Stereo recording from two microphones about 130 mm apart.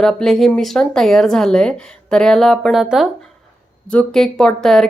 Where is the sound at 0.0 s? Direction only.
5° left (ahead or behind).